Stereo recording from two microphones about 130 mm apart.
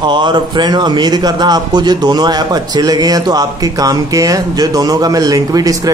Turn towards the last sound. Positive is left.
turn(degrees=-25)  # may be behind; listen again after turning